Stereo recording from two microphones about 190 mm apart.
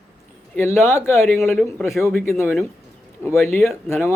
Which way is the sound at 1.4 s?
Centre (ahead or behind).